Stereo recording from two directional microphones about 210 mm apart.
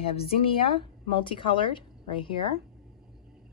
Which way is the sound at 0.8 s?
25° left (ahead or behind).